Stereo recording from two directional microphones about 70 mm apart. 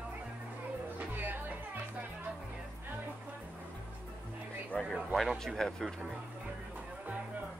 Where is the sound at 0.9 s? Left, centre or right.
Right.